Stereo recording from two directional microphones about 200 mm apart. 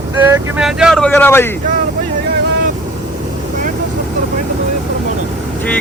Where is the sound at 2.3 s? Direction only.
60° right (ahead or behind).